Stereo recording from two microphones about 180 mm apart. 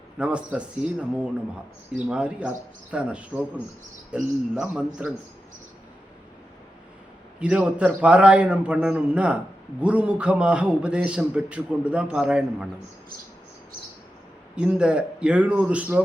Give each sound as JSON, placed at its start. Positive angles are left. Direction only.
{"t": 0.2, "sound": "a man's voice", "side_deg": -5}
{"t": 7.3, "sound": "a man's voice", "side_deg": -5}
{"t": 14.5, "sound": "a man's voice", "side_deg": -5}